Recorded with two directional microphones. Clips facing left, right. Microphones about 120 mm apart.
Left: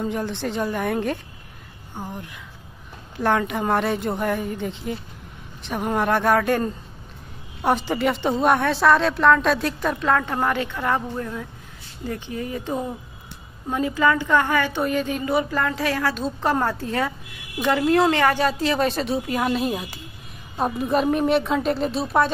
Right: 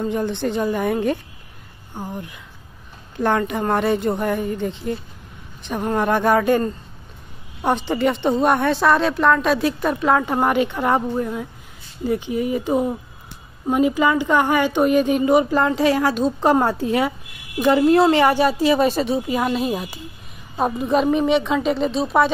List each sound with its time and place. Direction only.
0.0 s a woman's voice: centre (ahead or behind)